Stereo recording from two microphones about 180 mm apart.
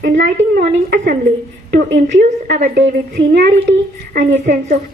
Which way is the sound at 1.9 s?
75° right (ahead or behind).